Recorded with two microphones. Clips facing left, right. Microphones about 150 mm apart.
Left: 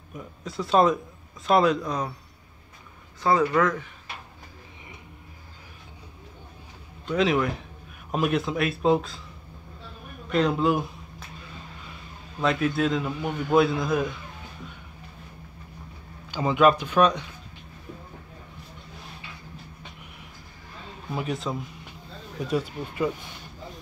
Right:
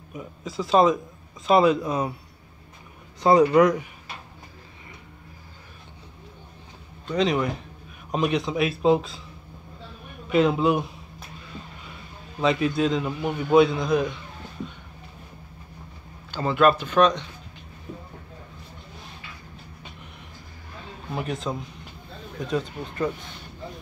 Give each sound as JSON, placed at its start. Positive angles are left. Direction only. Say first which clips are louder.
{"t": 0.1, "sound": "a man's voice", "louder": "right 2 dB", "side_deg": 0}
{"t": 3.2, "sound": "speech", "louder": "right 5 dB", "side_deg": -20}
{"t": 7.1, "sound": "a man's voice", "louder": "even", "side_deg": 0}
{"t": 10.3, "sound": "a man's voice", "louder": "right 2 dB", "side_deg": 0}
{"t": 12.4, "sound": "a man's voice", "louder": "right 2 dB", "side_deg": 0}
{"t": 16.3, "sound": "speech", "louder": "even", "side_deg": 10}
{"t": 21.1, "sound": "a man's voice", "louder": "even", "side_deg": 0}